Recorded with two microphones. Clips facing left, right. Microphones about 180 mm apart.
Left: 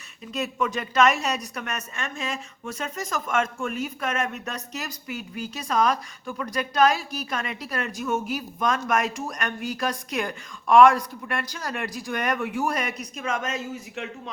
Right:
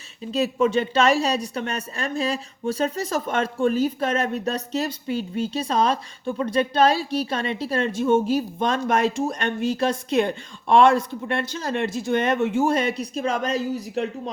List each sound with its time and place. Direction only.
0.3 s a woman's voice: 30° right (ahead or behind)